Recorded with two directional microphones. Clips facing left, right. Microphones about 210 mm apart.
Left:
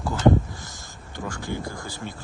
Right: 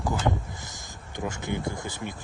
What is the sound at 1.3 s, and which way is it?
Speech, 20° right (ahead or behind).